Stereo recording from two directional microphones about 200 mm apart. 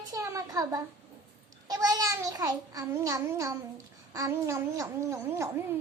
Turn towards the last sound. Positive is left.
turn(degrees=-15)  # may be behind; listen again after turning